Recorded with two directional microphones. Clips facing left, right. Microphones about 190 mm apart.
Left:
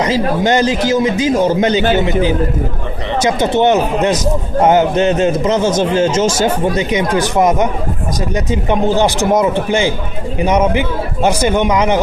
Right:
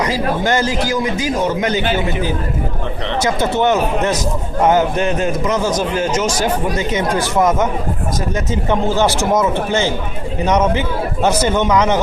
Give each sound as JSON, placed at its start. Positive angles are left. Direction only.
{"t": 0.0, "sound": "a man's voice", "side_deg": 20}
{"t": 3.2, "sound": "a man's voice", "side_deg": 20}